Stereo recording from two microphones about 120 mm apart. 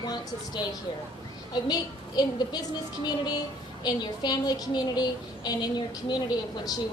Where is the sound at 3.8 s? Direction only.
35° left (ahead or behind).